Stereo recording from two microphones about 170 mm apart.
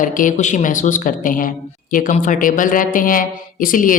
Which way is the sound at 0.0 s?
50° left (ahead or behind).